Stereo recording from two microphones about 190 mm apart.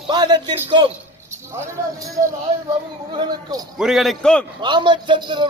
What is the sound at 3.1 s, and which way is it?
Speech, 20° right (ahead or behind).